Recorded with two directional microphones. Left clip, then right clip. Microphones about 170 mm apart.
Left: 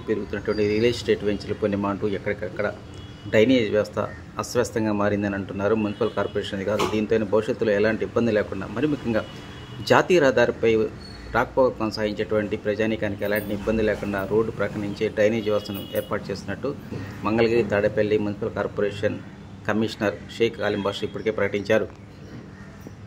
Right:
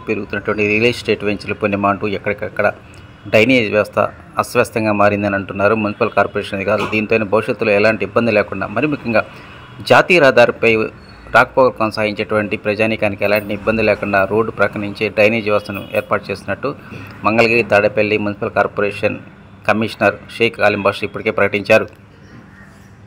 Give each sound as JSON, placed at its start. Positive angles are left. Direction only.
{"t": 0.1, "sound": "speech", "side_deg": -25}